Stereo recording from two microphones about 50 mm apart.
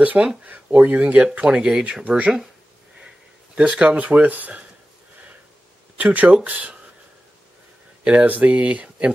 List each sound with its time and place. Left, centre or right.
0.0 s speech: right; by 1.9 s centre
2.0 s speech: right
3.5 s speech: right
5.9 s speech: right
8.0 s speech: right